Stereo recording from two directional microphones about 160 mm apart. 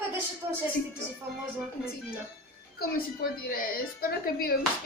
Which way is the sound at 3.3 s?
65° left (ahead or behind).